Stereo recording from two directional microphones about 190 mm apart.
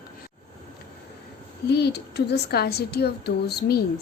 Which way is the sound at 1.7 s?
60° left (ahead or behind).